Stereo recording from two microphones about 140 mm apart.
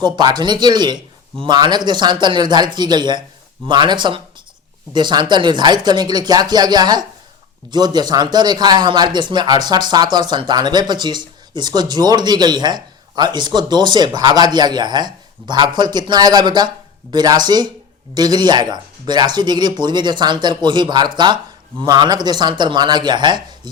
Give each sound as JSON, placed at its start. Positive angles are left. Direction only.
{"t": 0.0, "sound": "speech", "side_deg": -30}